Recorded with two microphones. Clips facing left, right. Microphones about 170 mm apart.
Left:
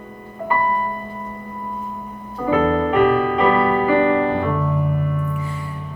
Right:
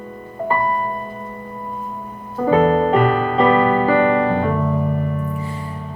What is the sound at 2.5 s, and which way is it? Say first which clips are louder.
Music: right 3 dB; 30° right (ahead or behind).